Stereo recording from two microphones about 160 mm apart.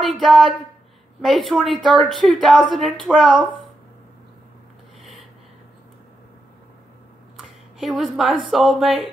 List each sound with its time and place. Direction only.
0.0 s a woman's voice: centre (ahead or behind)
7.3 s speech: centre (ahead or behind)